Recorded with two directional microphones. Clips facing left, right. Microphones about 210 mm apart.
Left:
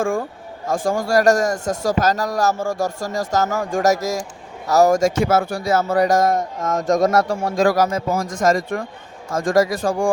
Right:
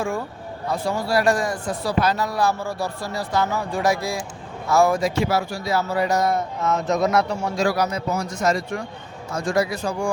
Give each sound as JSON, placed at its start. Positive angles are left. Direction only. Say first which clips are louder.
{"t": 0.0, "sound": "a man's voice", "louder": "left 5 dB", "side_deg": 50}
{"t": 8.1, "sound": "speech", "louder": "left 3 dB", "side_deg": 90}
{"t": 8.4, "sound": "a man's voice", "louder": "left 4 dB", "side_deg": 50}
{"t": 9.3, "sound": "speech", "louder": "left 4 dB", "side_deg": 90}
{"t": 9.6, "sound": "a man's voice", "louder": "left 6 dB", "side_deg": 45}